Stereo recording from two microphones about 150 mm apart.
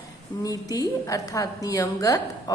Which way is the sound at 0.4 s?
25° left (ahead or behind).